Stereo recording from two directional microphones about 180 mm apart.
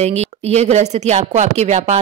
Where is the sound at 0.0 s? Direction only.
35° right (ahead or behind).